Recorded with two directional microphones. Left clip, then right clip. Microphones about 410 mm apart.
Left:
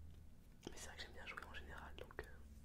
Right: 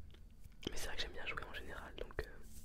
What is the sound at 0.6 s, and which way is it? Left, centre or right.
Whispering, right.